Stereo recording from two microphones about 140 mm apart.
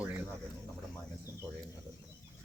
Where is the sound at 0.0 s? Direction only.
15° right (ahead or behind).